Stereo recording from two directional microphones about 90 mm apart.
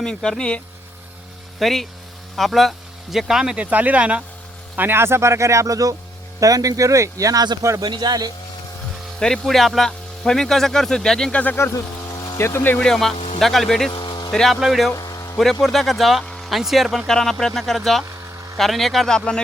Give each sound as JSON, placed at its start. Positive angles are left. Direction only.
{"t": 0.0, "sound": "speech", "side_deg": 5}
{"t": 4.8, "sound": "speech", "side_deg": -25}
{"t": 7.9, "sound": "speech", "side_deg": -55}
{"t": 9.1, "sound": "speech", "side_deg": 5}
{"t": 11.5, "sound": "a sound", "side_deg": 30}
{"t": 12.4, "sound": "speech", "side_deg": 30}
{"t": 12.7, "sound": "speech", "side_deg": 5}
{"t": 13.9, "sound": "vehicle", "side_deg": 55}
{"t": 14.3, "sound": "speech", "side_deg": 5}
{"t": 14.9, "sound": "a sound", "side_deg": 45}
{"t": 15.6, "sound": "speech", "side_deg": 5}